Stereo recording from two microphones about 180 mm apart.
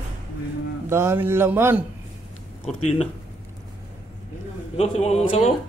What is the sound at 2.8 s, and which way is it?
Speech, 35° left (ahead or behind).